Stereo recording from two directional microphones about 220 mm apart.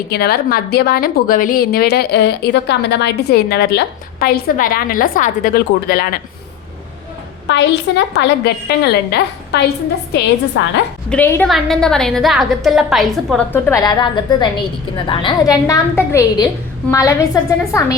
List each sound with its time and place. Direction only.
0.1 s a woman's voice: 45° left (ahead or behind)
7.4 s a woman's voice: 55° left (ahead or behind)
10.5 s a woman's voice: 60° left (ahead or behind)
11.1 s a woman's voice: 10° left (ahead or behind)
13.3 s a woman's voice: 10° left (ahead or behind)